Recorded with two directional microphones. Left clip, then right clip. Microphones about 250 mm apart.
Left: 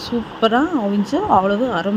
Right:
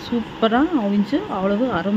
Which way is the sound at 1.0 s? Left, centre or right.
Centre.